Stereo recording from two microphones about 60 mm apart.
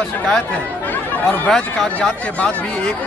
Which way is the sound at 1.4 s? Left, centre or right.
Centre.